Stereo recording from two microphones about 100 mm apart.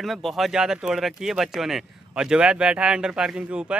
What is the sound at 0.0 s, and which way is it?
Speech, centre (ahead or behind).